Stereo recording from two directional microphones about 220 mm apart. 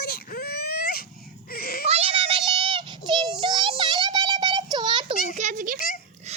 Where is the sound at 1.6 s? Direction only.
45° left (ahead or behind).